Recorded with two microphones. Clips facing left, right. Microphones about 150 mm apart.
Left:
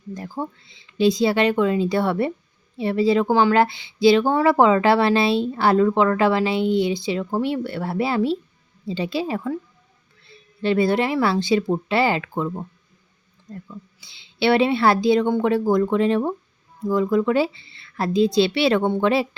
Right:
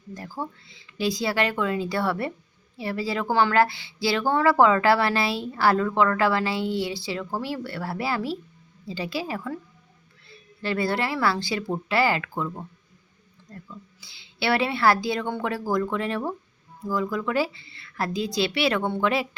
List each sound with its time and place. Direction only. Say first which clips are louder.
0.1 s speech: left 4 dB; 20° left (ahead or behind)
10.6 s speech: left 7 dB; 20° left (ahead or behind)